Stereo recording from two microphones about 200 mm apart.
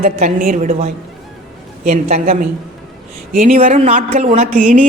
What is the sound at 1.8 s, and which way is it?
Speech, 35° right (ahead or behind).